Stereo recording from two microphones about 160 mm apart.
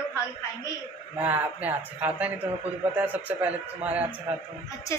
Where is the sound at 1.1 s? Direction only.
10° right (ahead or behind).